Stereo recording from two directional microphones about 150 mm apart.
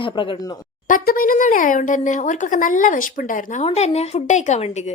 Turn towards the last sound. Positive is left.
turn(degrees=50)  # may be behind; listen again after turning